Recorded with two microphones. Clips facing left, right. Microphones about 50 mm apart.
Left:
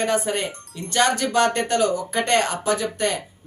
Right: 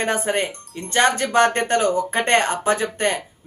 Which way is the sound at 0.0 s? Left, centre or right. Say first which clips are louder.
Right 1 dB; right.